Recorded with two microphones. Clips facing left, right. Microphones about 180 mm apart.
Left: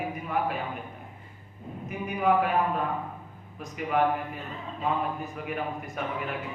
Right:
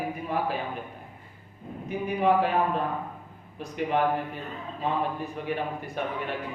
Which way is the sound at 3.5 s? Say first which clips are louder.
Even; 30° right (ahead or behind).